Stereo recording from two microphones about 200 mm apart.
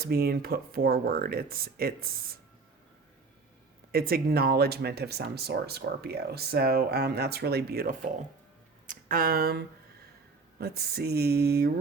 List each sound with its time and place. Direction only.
0.0 s speech: 50° right (ahead or behind)
3.9 s speech: 50° right (ahead or behind)